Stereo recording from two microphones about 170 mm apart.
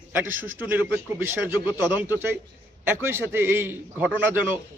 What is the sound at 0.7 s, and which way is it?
A man's voice, 10° right (ahead or behind).